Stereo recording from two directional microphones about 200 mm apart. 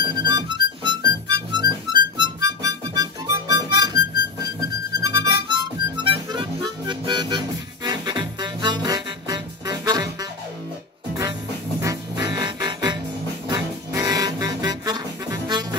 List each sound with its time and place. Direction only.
0.0 s music: 20° right (ahead or behind)
11.8 s music: 20° right (ahead or behind)